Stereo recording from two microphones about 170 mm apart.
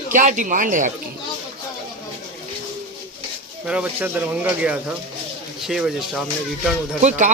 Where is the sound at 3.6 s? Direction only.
5° right (ahead or behind).